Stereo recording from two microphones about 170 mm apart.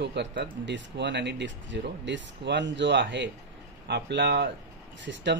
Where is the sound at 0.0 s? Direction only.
85° right.